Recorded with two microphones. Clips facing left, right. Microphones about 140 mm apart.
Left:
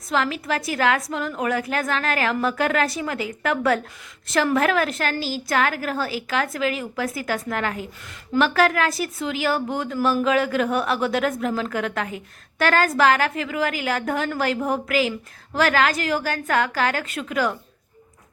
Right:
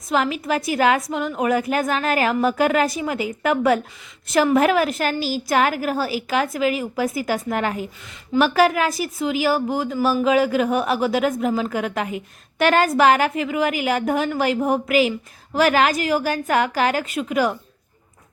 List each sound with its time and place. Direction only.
0.1 s a woman's voice: 15° right (ahead or behind)